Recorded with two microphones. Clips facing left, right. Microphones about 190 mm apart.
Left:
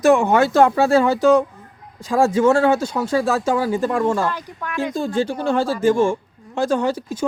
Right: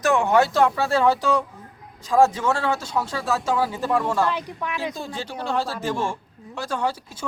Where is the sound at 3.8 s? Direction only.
50° left (ahead or behind).